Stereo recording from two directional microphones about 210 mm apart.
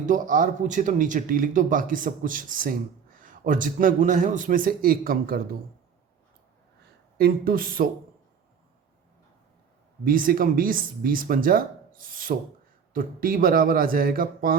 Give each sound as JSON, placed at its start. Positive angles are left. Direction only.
{"t": 0.0, "sound": "speech", "side_deg": -40}
{"t": 7.2, "sound": "speech", "side_deg": -45}
{"t": 10.0, "sound": "speech", "side_deg": -40}